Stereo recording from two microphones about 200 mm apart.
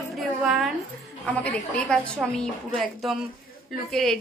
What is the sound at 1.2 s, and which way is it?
A woman's voice, 5° left (ahead or behind).